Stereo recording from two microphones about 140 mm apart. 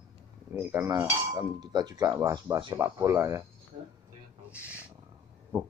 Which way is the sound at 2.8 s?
20° right (ahead or behind).